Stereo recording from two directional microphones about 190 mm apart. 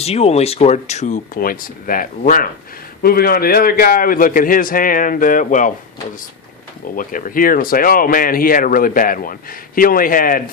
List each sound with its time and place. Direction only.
0.0 s speech: 35° left (ahead or behind)
6.9 s speech: 45° left (ahead or behind)